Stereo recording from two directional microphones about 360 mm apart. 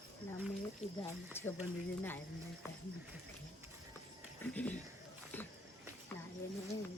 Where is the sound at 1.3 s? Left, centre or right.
Centre.